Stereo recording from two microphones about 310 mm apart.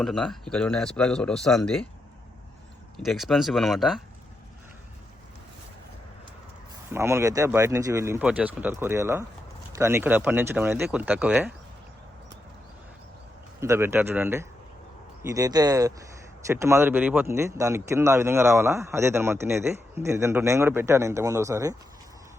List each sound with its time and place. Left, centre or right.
0.0 s speech: centre
3.0 s speech: centre
6.9 s speech: centre
13.6 s speech: centre